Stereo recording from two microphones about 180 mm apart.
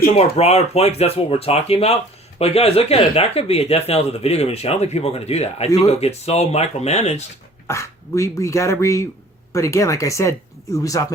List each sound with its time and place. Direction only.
0.2 s speech: 35° left (ahead or behind)
7.7 s speech: 15° left (ahead or behind)